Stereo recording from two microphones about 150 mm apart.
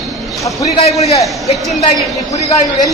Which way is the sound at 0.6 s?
45° left (ahead or behind).